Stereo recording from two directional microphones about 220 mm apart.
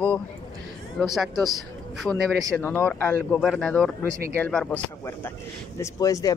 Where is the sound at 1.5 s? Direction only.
Centre (ahead or behind).